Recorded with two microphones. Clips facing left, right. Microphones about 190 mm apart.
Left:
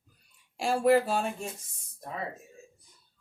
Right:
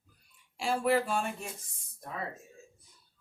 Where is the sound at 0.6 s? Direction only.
40° left (ahead or behind).